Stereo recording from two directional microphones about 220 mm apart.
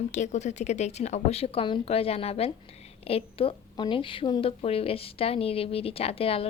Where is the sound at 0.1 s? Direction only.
30° left (ahead or behind).